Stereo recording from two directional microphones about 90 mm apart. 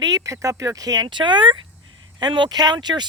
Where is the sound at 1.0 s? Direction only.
60° right (ahead or behind).